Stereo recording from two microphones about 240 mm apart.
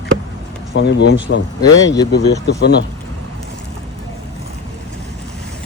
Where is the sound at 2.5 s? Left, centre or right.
Left.